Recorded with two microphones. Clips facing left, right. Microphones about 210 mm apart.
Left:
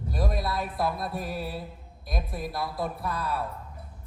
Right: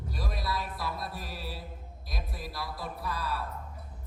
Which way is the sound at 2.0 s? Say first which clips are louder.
Left 8 dB; 55° left (ahead or behind).